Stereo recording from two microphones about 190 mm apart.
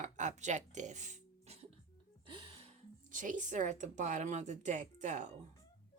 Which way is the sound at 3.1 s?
45° right (ahead or behind).